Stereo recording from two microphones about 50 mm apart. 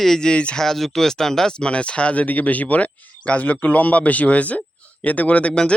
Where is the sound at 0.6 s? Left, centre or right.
Centre.